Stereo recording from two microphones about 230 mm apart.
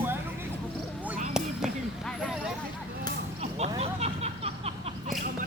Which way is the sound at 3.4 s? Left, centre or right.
Right.